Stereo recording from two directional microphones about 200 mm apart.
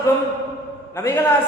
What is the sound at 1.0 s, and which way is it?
Speech, 15° left (ahead or behind).